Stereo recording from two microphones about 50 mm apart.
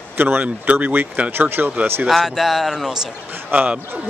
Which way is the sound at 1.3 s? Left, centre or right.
Right.